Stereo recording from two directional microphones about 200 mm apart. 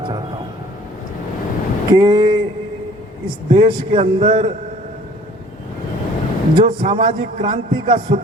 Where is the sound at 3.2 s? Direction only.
25° right (ahead or behind).